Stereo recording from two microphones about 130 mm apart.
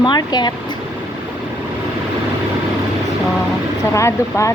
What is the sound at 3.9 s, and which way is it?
Speech, 25° left (ahead or behind).